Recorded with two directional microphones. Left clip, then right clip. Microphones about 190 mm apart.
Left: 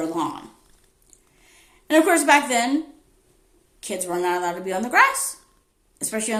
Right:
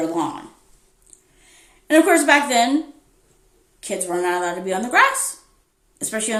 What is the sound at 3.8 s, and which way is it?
A woman's voice, 15° left (ahead or behind).